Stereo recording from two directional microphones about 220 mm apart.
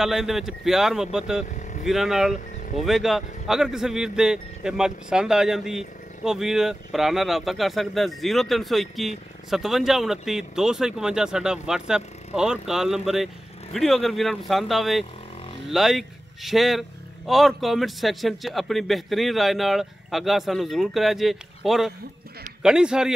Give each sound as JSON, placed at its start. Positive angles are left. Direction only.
{"t": 0.0, "sound": "a man's voice", "side_deg": 0}
{"t": 1.5, "sound": "vehicle", "side_deg": 35}
{"t": 1.9, "sound": "a man's voice", "side_deg": 0}